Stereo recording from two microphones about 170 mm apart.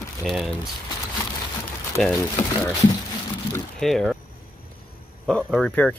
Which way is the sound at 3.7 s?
5° left (ahead or behind).